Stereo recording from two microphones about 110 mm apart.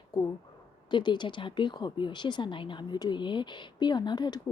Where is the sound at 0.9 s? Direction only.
45° left (ahead or behind).